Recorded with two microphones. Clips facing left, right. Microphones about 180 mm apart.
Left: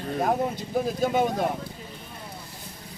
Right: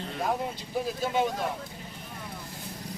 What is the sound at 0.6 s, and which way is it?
Speech, 45° left (ahead or behind).